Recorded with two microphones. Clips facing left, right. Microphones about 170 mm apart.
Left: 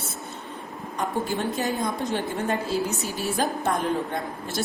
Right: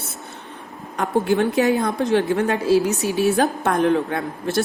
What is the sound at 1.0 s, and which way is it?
A woman's voice, 70° right (ahead or behind).